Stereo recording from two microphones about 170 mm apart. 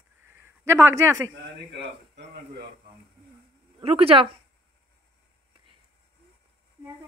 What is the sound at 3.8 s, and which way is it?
Speech, 35° right (ahead or behind).